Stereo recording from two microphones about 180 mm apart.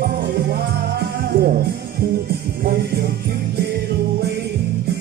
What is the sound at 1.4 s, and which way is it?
Music, 60° right (ahead or behind).